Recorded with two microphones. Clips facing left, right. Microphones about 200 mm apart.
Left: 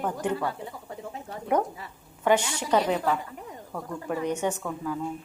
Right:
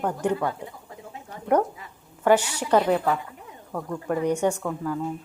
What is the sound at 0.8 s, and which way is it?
Bird, 35° left (ahead or behind).